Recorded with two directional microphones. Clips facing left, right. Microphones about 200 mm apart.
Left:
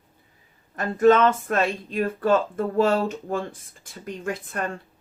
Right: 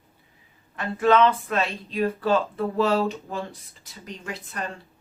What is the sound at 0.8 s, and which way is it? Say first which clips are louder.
Speech: left 2 dB; 45° left (ahead or behind).